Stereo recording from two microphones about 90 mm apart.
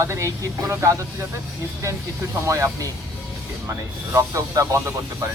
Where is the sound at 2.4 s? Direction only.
35° right (ahead or behind).